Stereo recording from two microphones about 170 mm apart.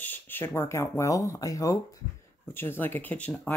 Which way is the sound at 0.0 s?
10° left (ahead or behind).